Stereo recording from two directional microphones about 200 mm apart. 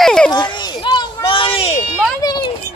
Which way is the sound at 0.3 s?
20° left (ahead or behind).